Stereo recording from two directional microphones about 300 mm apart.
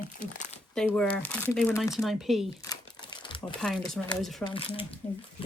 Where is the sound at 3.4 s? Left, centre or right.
Centre.